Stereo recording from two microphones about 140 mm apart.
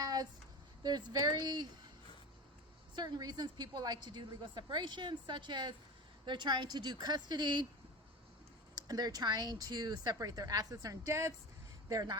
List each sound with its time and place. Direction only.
0.0 s a sound: 25° right (ahead or behind)
0.8 s a woman's voice: 30° right (ahead or behind)
2.9 s a woman's voice: 30° right (ahead or behind)
8.7 s speech: 25° right (ahead or behind)